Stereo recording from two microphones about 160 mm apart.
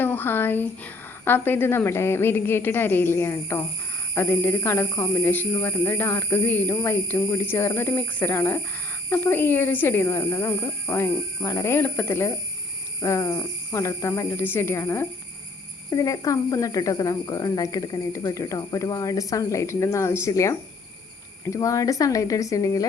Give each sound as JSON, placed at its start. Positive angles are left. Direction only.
{"t": 0.0, "sound": "speech", "side_deg": 10}